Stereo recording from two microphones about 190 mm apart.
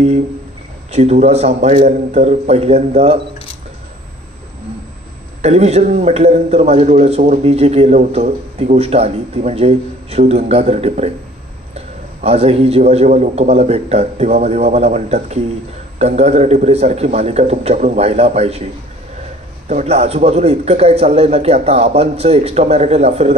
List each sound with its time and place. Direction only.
0.9 s a man's voice: 35° right (ahead or behind)
5.4 s a man's voice: 35° right (ahead or behind)
19.7 s a man's voice: 35° right (ahead or behind)